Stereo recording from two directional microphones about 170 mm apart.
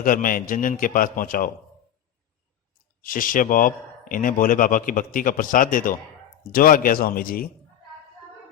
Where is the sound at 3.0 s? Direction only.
55° left (ahead or behind).